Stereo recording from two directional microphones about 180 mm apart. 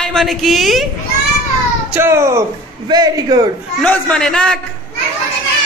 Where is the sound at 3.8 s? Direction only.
5° left (ahead or behind).